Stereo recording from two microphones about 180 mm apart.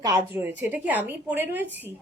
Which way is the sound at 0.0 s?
15° right (ahead or behind).